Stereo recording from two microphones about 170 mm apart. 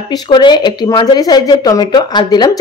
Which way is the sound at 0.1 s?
25° left (ahead or behind).